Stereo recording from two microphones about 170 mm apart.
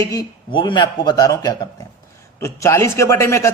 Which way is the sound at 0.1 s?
25° left (ahead or behind).